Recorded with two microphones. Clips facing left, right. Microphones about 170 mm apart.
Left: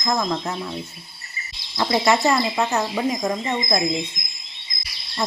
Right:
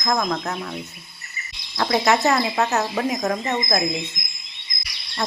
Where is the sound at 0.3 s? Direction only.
20° left (ahead or behind).